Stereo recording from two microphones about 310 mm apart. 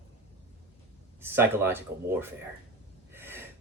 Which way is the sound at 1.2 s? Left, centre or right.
Centre.